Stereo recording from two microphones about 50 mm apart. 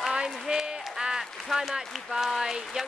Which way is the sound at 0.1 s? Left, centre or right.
Centre.